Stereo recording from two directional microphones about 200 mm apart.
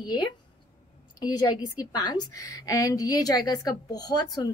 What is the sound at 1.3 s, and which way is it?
A woman's voice, 20° left (ahead or behind).